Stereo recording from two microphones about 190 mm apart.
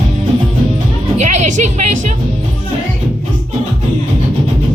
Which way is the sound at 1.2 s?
40° right (ahead or behind).